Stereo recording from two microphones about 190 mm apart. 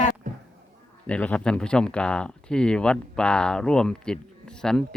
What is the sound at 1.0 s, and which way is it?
Speech, 5° left (ahead or behind).